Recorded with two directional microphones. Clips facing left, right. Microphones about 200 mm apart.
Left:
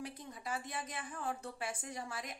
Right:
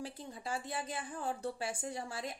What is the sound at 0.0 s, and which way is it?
Speech, 30° right (ahead or behind).